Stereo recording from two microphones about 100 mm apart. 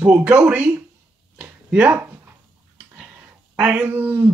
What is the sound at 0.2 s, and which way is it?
Speech, 10° right (ahead or behind).